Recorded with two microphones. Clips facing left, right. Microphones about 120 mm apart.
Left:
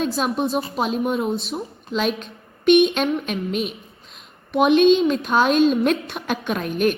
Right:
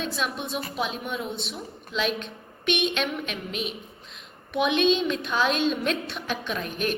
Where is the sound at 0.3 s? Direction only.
35° left (ahead or behind).